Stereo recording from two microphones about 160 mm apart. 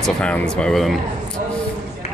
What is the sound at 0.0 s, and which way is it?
Speech, 5° left (ahead or behind).